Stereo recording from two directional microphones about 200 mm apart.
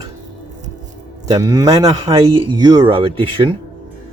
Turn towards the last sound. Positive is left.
turn(degrees=-25)  # may be behind; listen again after turning